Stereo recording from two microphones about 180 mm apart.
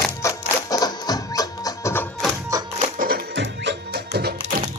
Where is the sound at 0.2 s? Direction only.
15° left (ahead or behind).